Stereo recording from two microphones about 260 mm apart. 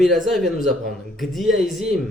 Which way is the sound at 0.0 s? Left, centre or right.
Centre.